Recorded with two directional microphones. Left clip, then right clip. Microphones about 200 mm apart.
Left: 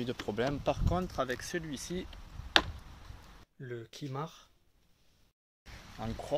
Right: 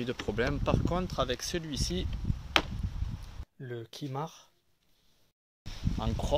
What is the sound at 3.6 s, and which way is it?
Speech, 15° right (ahead or behind).